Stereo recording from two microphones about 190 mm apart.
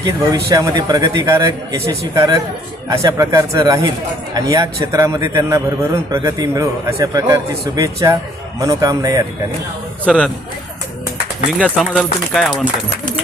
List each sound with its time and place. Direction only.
0.0 s a man's voice: 20° right (ahead or behind)
10.1 s speech: 5° left (ahead or behind)
11.5 s speech: centre (ahead or behind)